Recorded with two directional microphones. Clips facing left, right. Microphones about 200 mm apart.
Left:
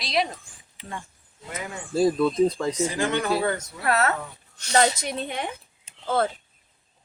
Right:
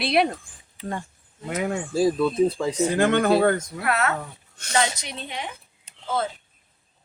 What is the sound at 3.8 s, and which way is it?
Speech, 35° left (ahead or behind).